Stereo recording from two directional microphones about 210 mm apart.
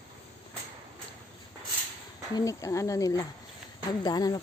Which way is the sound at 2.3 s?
15° left (ahead or behind).